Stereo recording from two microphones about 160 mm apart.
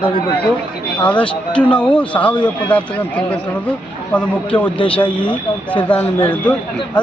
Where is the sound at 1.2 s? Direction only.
30° left (ahead or behind).